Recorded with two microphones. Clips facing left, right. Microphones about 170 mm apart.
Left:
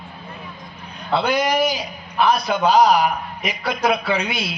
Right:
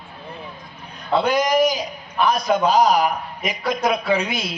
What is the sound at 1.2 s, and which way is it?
A man's voice, 40° right (ahead or behind).